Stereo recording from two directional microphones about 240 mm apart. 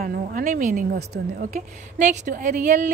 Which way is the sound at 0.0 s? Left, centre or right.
Right.